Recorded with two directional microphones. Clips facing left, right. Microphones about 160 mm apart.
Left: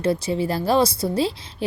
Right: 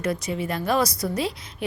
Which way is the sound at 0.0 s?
30° left (ahead or behind).